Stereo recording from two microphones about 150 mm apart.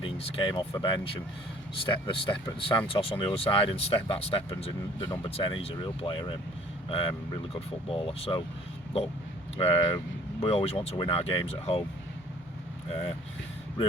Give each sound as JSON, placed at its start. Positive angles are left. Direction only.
{"t": 0.0, "sound": "speech", "side_deg": 40}
{"t": 9.6, "sound": "speech", "side_deg": 40}